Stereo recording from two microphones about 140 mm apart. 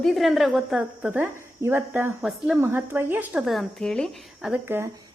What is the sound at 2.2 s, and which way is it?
A woman's voice, 5° right (ahead or behind).